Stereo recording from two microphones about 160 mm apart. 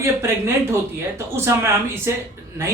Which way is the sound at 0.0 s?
15° right (ahead or behind).